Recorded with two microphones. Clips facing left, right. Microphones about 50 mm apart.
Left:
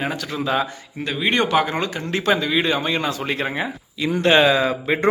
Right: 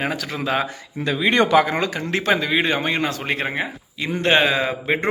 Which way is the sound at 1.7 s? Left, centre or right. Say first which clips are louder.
Right 1 dB; right.